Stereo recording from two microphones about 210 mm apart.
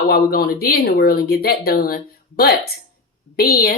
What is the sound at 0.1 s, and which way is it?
A woman's voice, 45° left (ahead or behind).